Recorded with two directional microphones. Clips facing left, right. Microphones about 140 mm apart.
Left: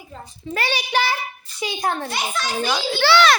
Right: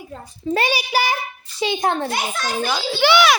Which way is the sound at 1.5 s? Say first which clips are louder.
Right 4 dB; 25° right (ahead or behind).